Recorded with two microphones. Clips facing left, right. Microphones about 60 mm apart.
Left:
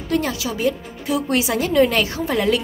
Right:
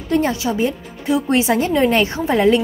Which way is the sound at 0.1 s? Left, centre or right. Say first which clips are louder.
Right 4 dB; right.